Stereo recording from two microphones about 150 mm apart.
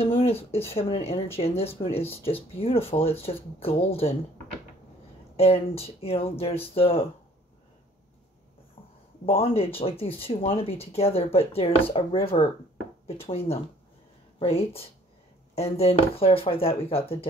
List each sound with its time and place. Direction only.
0.0 s speech: 40° left (ahead or behind)
5.3 s speech: 40° left (ahead or behind)
9.2 s speech: 40° left (ahead or behind)
14.4 s speech: 40° left (ahead or behind)